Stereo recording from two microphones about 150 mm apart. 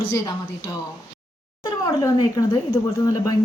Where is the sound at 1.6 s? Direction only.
30° left (ahead or behind).